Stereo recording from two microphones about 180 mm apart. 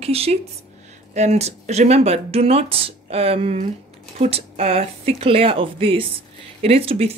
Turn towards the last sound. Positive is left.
turn(degrees=-35)  # may be behind; listen again after turning